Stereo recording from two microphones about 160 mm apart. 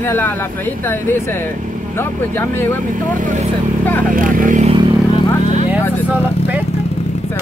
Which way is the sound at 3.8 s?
10° left (ahead or behind).